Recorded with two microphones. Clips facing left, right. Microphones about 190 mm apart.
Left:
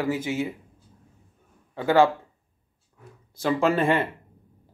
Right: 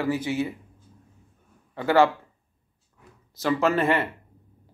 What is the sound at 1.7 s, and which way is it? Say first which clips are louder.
Speech: even; 15° left (ahead or behind).